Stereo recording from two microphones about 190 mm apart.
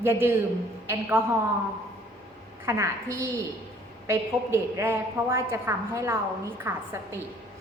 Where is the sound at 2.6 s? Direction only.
15° right (ahead or behind).